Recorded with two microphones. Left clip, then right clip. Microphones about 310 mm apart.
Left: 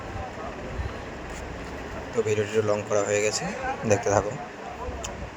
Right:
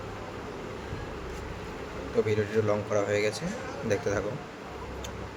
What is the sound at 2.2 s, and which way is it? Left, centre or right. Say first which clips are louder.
Speech: left 5 dB; centre.